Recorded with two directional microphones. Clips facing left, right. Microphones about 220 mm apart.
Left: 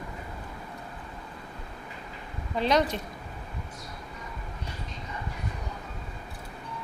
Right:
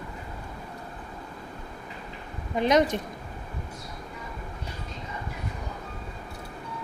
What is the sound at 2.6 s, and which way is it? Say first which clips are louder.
Speech: right 3 dB; 20° right (ahead or behind).